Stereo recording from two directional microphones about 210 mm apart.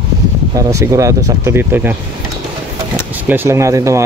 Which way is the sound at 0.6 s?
15° right (ahead or behind).